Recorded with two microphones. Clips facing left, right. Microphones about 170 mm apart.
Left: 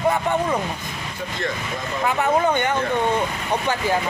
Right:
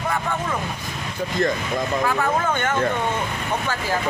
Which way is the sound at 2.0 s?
20° left (ahead or behind).